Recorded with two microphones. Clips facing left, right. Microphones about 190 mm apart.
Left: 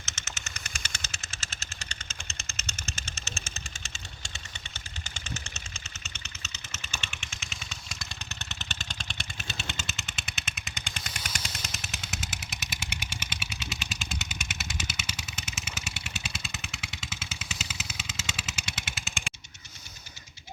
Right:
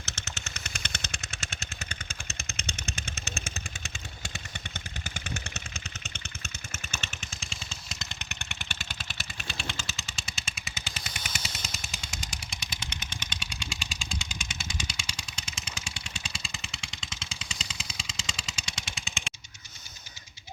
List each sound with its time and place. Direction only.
0.0 s vehicle: 60° right (ahead or behind)
7.0 s vehicle: 40° right (ahead or behind); by 9.2 s 5° right (ahead or behind)
10.2 s vehicle: centre (ahead or behind)